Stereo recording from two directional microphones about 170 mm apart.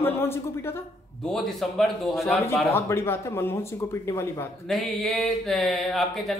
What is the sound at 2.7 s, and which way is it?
A man's voice, 15° left (ahead or behind).